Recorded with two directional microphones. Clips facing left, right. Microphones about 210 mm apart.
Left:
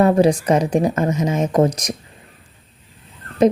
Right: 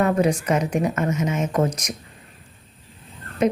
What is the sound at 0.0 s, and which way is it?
A woman's voice, 30° left (ahead or behind).